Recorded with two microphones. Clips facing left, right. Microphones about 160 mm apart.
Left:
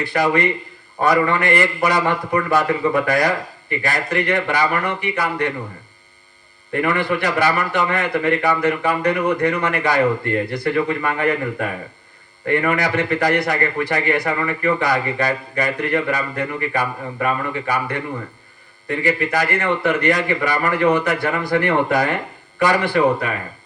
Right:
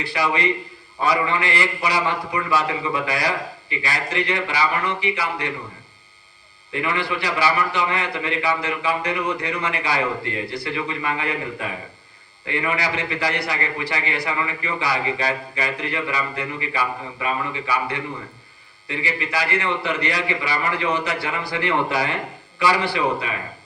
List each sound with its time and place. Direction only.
0.0 s a man's voice: 50° left (ahead or behind)
6.7 s a man's voice: 55° left (ahead or behind)